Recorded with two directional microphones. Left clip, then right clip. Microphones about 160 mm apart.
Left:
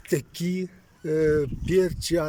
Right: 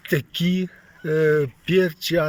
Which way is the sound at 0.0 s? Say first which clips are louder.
Right 4 dB; centre (ahead or behind).